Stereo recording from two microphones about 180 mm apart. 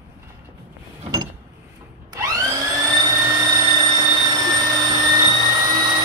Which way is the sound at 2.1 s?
20° right (ahead or behind).